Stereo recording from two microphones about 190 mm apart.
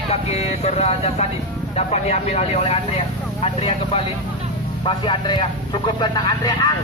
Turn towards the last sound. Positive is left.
turn(degrees=25)  # may be behind; listen again after turning